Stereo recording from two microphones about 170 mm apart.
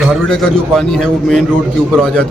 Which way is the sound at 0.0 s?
Centre (ahead or behind).